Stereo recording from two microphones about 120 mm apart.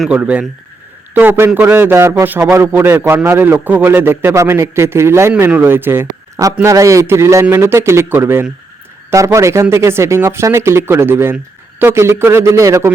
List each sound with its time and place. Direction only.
0.1 s speech: 10° right (ahead or behind)